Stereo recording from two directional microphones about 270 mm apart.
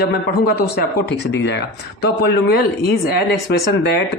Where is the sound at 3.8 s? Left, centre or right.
Left.